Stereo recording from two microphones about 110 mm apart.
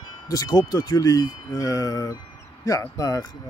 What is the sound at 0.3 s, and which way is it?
Speech, 35° left (ahead or behind).